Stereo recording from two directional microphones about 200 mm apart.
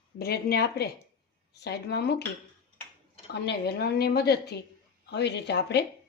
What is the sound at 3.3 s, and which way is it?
A woman's voice, 55° left (ahead or behind).